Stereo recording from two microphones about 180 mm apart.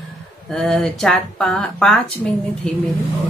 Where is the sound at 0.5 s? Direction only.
Centre (ahead or behind).